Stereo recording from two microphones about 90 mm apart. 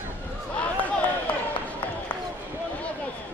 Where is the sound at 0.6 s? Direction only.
15° left (ahead or behind).